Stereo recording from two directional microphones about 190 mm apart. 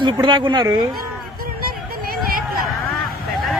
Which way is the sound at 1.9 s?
50° right (ahead or behind).